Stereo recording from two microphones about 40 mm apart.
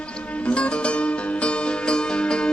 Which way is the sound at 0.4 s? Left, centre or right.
Left.